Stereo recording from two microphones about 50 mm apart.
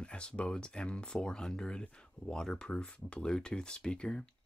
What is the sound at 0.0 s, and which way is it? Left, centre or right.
Speech, left.